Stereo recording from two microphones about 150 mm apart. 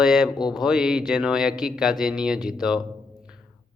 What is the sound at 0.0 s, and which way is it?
Speech, 5° right (ahead or behind).